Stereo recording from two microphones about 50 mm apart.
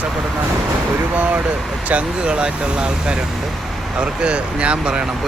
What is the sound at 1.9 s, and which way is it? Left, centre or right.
Speech, right.